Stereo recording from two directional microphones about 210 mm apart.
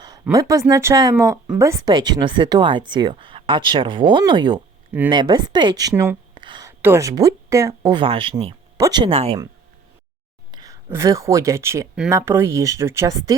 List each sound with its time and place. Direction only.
0.0 s a sound: 20° right (ahead or behind)
0.7 s speech: 15° right (ahead or behind)
10.5 s speech: 15° right (ahead or behind)